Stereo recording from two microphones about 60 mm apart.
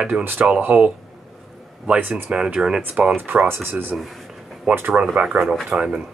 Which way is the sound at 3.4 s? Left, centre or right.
Right.